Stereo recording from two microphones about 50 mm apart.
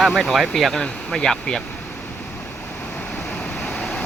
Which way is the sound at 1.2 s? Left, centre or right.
Centre.